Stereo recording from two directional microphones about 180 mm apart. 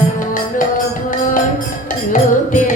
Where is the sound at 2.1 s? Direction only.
45° left (ahead or behind).